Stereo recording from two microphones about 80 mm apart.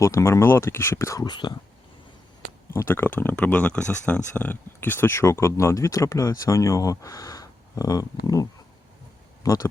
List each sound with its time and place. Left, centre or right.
0.0 s speech: left
1.2 s speech: left
2.7 s speech: left